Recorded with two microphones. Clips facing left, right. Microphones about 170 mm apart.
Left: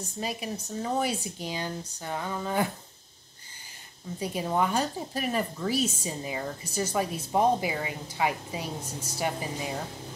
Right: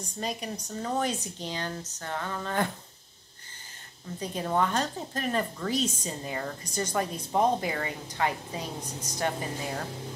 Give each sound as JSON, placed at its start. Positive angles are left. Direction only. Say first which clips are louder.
{"t": 0.0, "sound": "speech", "louder": "even", "side_deg": 5}
{"t": 4.2, "sound": "speech", "louder": "even", "side_deg": 10}